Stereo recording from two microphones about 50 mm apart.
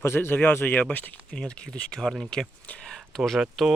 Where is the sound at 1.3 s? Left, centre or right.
Left.